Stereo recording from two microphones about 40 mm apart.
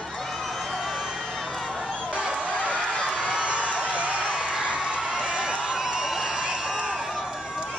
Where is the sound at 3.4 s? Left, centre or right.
Right.